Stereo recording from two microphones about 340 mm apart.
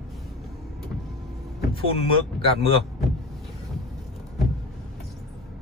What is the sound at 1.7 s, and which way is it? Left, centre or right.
Speech, centre.